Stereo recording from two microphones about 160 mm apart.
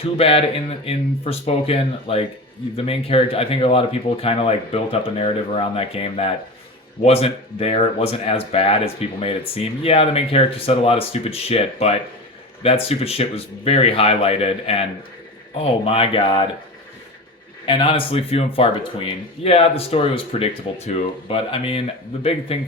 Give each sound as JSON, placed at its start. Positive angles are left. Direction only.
{"t": 0.2, "sound": "speech", "side_deg": 35}
{"t": 17.7, "sound": "speech", "side_deg": 30}